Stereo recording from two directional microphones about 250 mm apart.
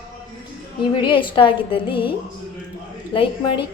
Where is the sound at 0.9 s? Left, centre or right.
Centre.